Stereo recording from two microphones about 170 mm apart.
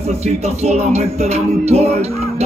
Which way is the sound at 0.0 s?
40° right (ahead or behind).